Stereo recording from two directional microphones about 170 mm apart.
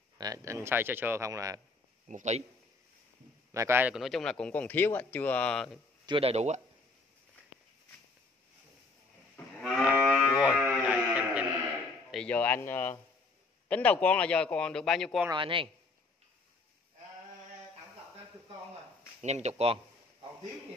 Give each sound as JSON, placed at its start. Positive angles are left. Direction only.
{"t": 0.2, "sound": "a man's voice", "side_deg": -20}
{"t": 2.0, "sound": "a man's voice", "side_deg": -45}
{"t": 3.5, "sound": "a man's voice", "side_deg": -15}
{"t": 4.0, "sound": "speech", "side_deg": 5}
{"t": 6.0, "sound": "speech", "side_deg": -35}
{"t": 9.6, "sound": "moo", "side_deg": -5}
{"t": 10.4, "sound": "sheep", "side_deg": -5}
{"t": 12.1, "sound": "speech", "side_deg": 5}
{"t": 15.2, "sound": "speech", "side_deg": -30}
{"t": 19.2, "sound": "speech", "side_deg": -40}